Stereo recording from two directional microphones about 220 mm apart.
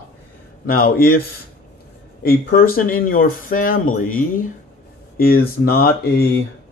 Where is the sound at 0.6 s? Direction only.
40° left (ahead or behind).